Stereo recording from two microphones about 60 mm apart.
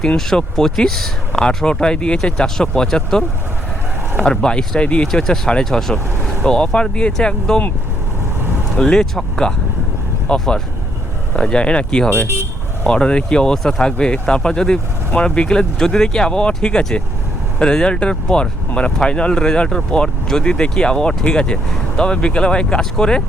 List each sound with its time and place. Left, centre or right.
0.2 s speech: centre
8.8 s speech: centre